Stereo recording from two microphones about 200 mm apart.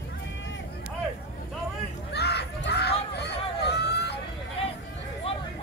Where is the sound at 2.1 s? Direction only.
55° left (ahead or behind).